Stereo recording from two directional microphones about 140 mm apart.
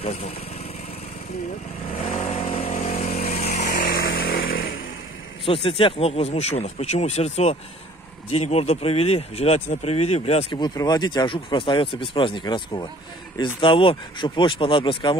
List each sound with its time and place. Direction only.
0.0 s speech: 50° left (ahead or behind)
2.0 s vehicle: 55° left (ahead or behind)
3.6 s chainsaw: 80° left
5.4 s speech: 40° left (ahead or behind)
10.5 s speech: 30° left (ahead or behind)